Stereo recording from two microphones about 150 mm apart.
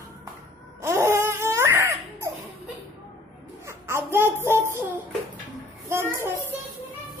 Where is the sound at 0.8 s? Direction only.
15° right (ahead or behind).